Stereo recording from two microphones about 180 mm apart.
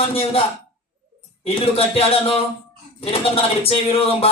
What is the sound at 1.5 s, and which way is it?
Speech, 30° left (ahead or behind).